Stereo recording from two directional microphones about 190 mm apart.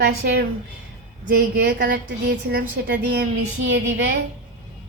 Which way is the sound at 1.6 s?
55° right (ahead or behind).